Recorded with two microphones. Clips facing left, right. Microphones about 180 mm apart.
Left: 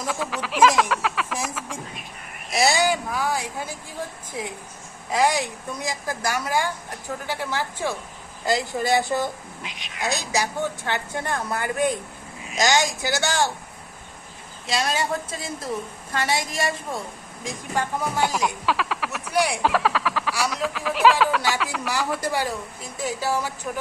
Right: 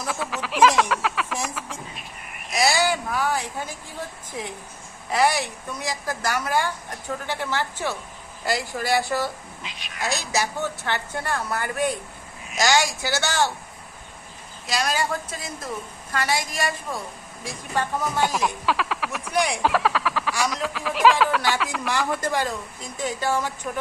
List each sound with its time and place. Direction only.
0.1 s a sound: centre (ahead or behind)
2.5 s a sound: 25° left (ahead or behind)
5.1 s a woman's voice: 15° left (ahead or behind)
14.7 s a woman's voice: 25° left (ahead or behind)
17.4 s a woman's voice: 15° left (ahead or behind)
18.4 s a woman's voice: centre (ahead or behind)